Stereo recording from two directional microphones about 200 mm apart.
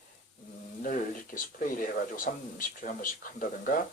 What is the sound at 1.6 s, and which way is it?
Speech, 40° left (ahead or behind).